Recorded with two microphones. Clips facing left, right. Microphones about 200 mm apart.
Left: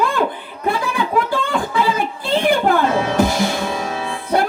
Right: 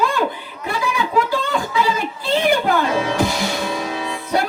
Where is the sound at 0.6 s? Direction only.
50° left (ahead or behind).